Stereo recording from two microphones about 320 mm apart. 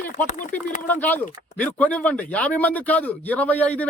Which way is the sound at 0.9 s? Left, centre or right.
Centre.